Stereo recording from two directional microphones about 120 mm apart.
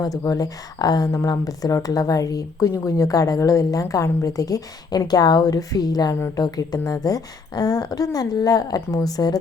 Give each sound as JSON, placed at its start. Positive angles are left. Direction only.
{"t": 0.0, "sound": "a woman's voice", "side_deg": 30}